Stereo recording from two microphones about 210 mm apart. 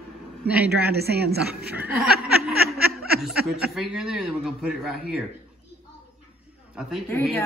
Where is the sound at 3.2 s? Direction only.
5° right (ahead or behind).